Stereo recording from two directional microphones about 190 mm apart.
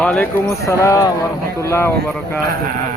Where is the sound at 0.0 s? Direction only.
10° left (ahead or behind).